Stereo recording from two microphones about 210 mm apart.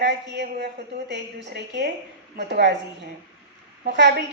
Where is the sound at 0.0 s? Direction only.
55° right (ahead or behind).